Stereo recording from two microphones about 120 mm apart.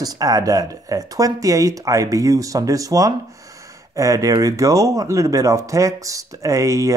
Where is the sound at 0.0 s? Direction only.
30° right (ahead or behind).